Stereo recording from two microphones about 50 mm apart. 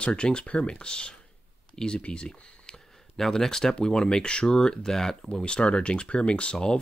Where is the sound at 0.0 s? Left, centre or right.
Centre.